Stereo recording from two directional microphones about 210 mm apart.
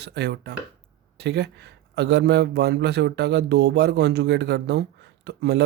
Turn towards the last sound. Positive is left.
turn(degrees=-50)  # may be behind; listen again after turning